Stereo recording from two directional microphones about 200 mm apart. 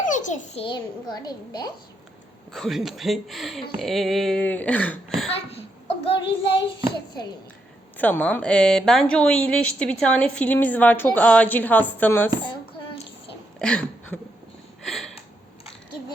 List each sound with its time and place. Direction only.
0.0 s a child's voice: 40° left (ahead or behind); by 1.7 s 20° left (ahead or behind)
2.5 s speech: centre (ahead or behind)
6.1 s a child's voice: 25° left (ahead or behind)
7.9 s a woman's voice: 10° left (ahead or behind)
13.6 s speech: 5° left (ahead or behind)
14.8 s a sound: centre (ahead or behind)